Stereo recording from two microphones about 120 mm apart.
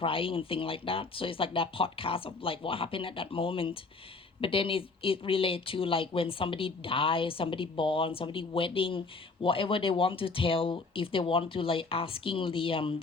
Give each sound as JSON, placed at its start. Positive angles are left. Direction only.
{"t": 0.0, "sound": "speech", "side_deg": 50}